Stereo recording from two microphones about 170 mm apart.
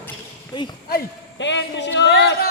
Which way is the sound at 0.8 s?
75° left (ahead or behind).